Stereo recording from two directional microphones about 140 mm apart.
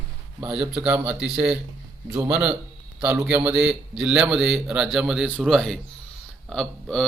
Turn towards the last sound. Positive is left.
turn(degrees=5)  # may be behind; listen again after turning